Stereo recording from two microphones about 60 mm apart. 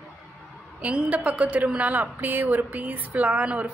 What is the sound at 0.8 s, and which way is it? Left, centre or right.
A woman's voice, right.